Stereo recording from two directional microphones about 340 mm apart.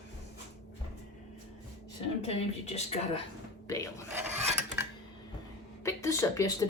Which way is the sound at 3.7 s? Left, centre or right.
Centre.